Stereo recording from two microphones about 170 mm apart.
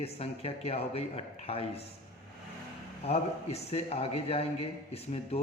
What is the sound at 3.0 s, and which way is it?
A man's voice, 35° left (ahead or behind).